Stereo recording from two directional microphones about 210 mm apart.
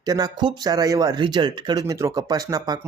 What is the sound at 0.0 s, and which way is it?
Speech, 20° right (ahead or behind).